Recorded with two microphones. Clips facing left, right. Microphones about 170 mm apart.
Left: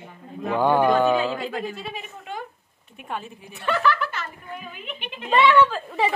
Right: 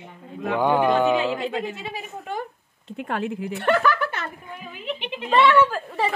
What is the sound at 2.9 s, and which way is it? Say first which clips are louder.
A woman's voice: right 7 dB; 85° right.